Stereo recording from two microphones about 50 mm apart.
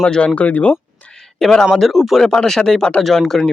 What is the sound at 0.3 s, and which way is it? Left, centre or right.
Speech, left.